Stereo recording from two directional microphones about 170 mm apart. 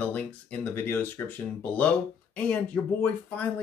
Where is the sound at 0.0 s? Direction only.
10° left (ahead or behind).